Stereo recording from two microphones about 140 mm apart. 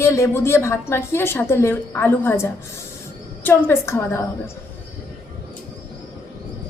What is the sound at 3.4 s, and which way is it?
Speech, 15° left (ahead or behind).